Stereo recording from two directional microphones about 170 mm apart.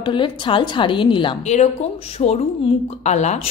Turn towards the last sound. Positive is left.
turn(degrees=45)  # may be behind; listen again after turning